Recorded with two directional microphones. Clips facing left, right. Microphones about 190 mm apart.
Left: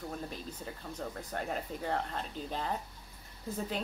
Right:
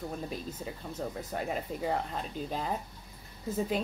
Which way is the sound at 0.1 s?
5° right (ahead or behind).